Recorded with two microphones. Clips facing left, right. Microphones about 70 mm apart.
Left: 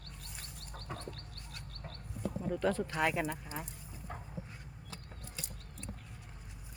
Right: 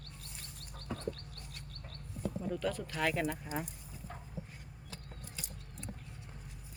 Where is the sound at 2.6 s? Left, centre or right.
Left; by 3.3 s centre.